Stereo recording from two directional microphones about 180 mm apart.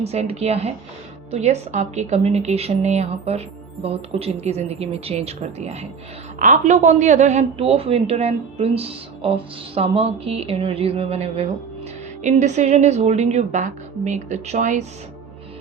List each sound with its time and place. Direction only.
0.0 s a woman's voice: 35° right (ahead or behind)